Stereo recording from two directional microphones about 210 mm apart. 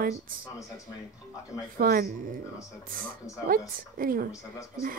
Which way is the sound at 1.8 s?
45° right (ahead or behind).